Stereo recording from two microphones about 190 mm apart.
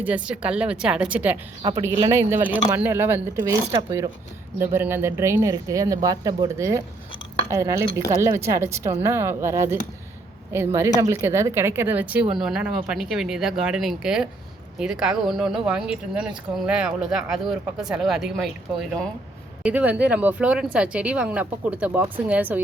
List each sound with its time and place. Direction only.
0.0 s speech: 5° right (ahead or behind)